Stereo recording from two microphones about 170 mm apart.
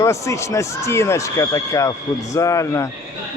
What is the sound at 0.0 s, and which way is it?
Speech, 15° left (ahead or behind).